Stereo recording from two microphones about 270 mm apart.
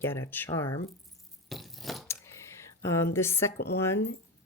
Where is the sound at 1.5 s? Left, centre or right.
Centre.